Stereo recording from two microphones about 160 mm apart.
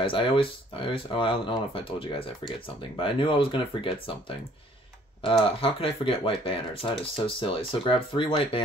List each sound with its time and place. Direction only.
0.0 s speech: 35° left (ahead or behind)
5.4 s speech: 35° left (ahead or behind)